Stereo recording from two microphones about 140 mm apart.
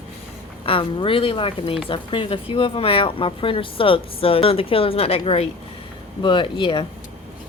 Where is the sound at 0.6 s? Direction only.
40° left (ahead or behind).